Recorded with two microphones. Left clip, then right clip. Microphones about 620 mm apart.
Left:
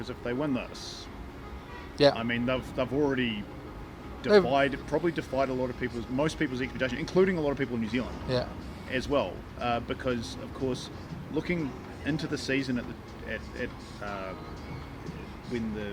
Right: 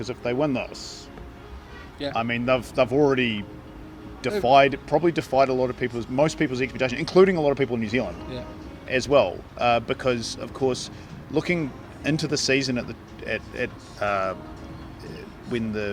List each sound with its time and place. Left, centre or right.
0.0 s speech: right
2.1 s speech: right
15.5 s speech: right